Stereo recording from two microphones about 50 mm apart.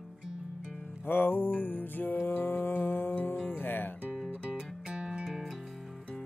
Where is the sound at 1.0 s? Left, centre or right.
Left.